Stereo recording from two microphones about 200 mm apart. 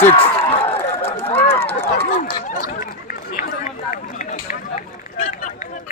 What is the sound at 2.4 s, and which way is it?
Chatter, 45° left (ahead or behind).